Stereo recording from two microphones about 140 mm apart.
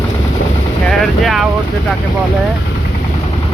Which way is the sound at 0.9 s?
Centre (ahead or behind).